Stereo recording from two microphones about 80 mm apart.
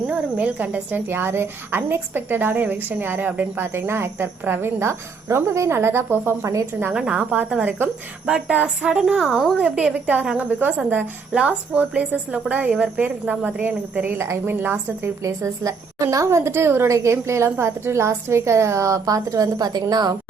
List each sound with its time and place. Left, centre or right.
0.1 s a woman's voice: centre
6.9 s a woman's voice: centre
14.2 s a woman's voice: right
14.5 s a woman's voice: right
15.2 s a woman's voice: right